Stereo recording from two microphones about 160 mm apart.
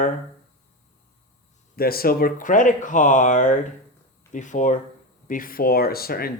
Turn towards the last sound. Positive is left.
turn(degrees=70)  # may be behind; listen again after turning